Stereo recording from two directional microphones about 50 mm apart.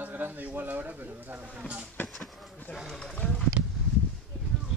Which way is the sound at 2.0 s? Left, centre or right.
Centre.